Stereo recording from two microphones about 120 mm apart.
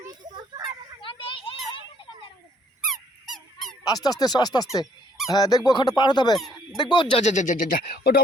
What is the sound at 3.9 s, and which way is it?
Speech, 30° left (ahead or behind).